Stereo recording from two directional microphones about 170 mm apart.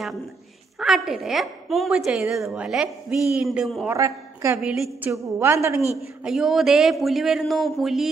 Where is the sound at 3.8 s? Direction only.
20° right (ahead or behind).